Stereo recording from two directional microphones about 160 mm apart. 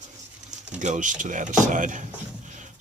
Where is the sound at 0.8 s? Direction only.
50° right (ahead or behind).